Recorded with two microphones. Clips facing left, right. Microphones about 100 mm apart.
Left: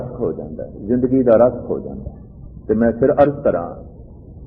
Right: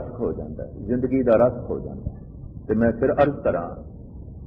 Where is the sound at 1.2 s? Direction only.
25° left (ahead or behind).